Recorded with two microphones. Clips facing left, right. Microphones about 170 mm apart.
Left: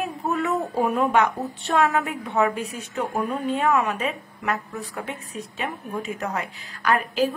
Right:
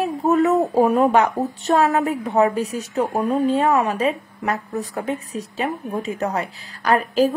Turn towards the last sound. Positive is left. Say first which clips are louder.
# right 5 dB
turn(degrees=-35)  # may be behind; listen again after turning